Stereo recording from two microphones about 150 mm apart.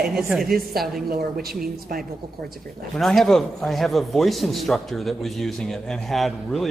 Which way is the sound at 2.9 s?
5° left (ahead or behind).